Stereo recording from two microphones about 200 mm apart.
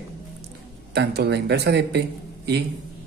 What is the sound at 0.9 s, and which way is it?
Speech, 55° right (ahead or behind).